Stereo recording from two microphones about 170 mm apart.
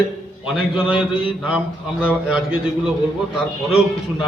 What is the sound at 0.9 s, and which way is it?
Speech, 30° left (ahead or behind).